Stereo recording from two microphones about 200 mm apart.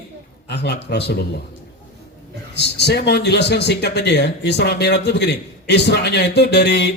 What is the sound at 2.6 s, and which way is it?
Speech, 60° left (ahead or behind).